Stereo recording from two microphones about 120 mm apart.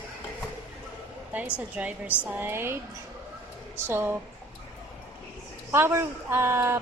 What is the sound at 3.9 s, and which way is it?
Speech, 20° right (ahead or behind).